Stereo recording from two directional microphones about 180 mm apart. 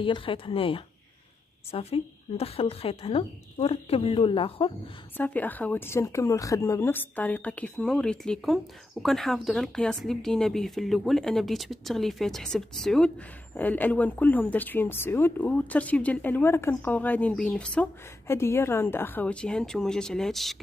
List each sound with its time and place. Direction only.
0.0 s a woman's voice: 30° left (ahead or behind)
5.1 s a woman's voice: 10° left (ahead or behind)